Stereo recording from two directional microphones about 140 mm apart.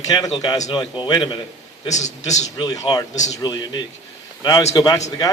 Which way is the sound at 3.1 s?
60° left (ahead or behind).